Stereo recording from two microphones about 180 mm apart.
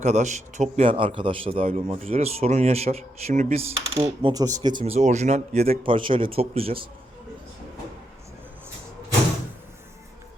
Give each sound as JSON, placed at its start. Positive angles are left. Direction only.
{"t": 0.0, "sound": "speech", "side_deg": -40}
{"t": 0.9, "sound": "speech", "side_deg": -30}
{"t": 4.3, "sound": "speech", "side_deg": -20}
{"t": 4.9, "sound": "speech", "side_deg": -40}